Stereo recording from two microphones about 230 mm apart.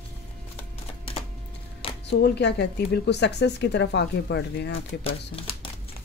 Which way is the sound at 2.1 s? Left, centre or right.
Left.